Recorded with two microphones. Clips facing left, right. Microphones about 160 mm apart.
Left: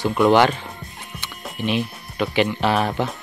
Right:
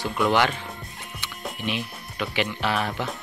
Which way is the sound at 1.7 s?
35° left (ahead or behind).